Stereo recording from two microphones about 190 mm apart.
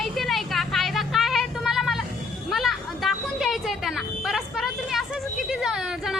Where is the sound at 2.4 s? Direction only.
Centre (ahead or behind).